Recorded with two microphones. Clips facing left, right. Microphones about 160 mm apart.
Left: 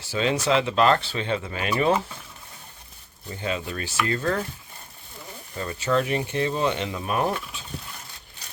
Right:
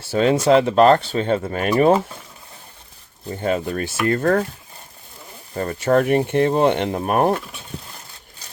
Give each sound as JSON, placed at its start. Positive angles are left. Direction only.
{"t": 0.1, "sound": "speech", "side_deg": -45}
{"t": 3.2, "sound": "speech", "side_deg": -45}
{"t": 5.5, "sound": "speech", "side_deg": -50}